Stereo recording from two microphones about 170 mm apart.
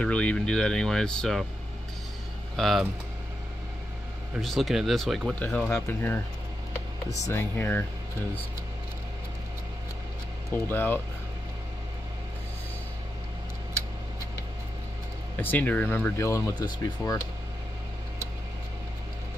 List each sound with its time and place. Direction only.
0.0 s speech: 5° left (ahead or behind)
2.5 s speech: centre (ahead or behind)
4.4 s speech: centre (ahead or behind)
7.2 s speech: 15° left (ahead or behind)
10.5 s speech: 10° left (ahead or behind)
15.4 s speech: 10° left (ahead or behind)